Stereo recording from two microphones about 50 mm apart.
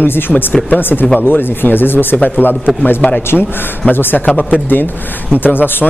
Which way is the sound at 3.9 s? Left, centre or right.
Left.